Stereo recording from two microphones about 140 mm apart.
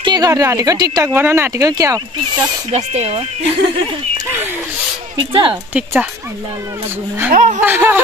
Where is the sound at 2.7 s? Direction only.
50° right (ahead or behind).